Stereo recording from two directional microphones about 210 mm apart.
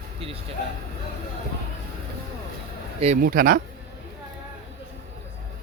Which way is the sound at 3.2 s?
45° right (ahead or behind).